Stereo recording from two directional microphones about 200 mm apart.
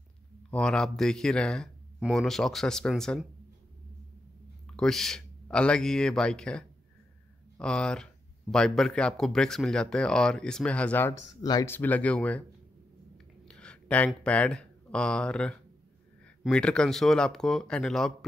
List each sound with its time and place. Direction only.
0.5 s speech: 5° left (ahead or behind)
4.6 s speech: 5° left (ahead or behind)
13.5 s speech: 5° left (ahead or behind)